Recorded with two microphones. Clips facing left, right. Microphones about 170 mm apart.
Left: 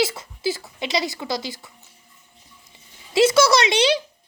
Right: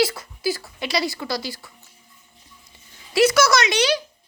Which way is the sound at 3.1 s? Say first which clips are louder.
Left 1 dB; 25° left (ahead or behind).